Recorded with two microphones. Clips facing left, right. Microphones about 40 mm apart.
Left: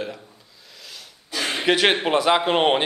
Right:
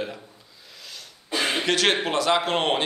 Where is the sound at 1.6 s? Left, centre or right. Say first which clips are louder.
Left 5 dB; centre.